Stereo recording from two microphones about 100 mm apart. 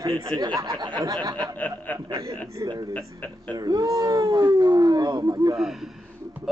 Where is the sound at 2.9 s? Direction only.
15° left (ahead or behind).